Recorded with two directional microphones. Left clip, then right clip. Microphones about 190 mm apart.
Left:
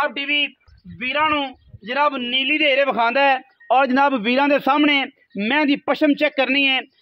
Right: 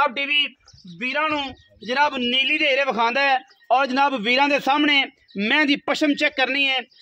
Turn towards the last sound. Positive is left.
turn(degrees=45)  # may be behind; listen again after turning